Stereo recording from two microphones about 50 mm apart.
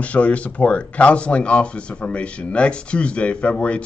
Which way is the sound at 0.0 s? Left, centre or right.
Left.